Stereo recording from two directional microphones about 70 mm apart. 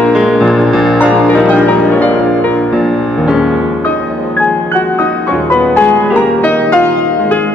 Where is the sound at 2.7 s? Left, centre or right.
Centre.